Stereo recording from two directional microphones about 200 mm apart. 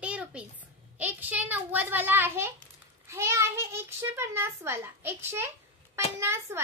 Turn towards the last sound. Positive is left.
turn(degrees=-10)  # may be behind; listen again after turning